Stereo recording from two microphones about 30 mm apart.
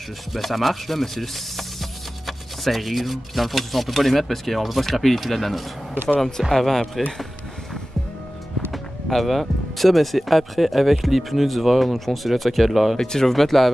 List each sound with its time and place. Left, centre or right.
0.3 s speech: centre
8.7 s speech: centre
12.9 s speech: centre
13.3 s speech: centre